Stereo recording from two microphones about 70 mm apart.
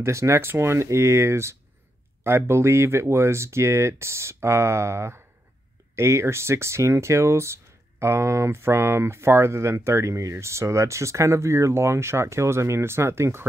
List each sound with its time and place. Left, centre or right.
0.0 s speech: right